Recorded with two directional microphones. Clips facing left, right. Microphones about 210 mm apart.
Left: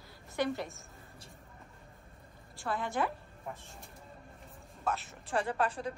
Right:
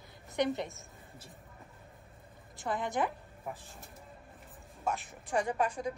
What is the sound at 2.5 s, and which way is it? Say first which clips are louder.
Speech: right 1 dB; 20° right (ahead or behind).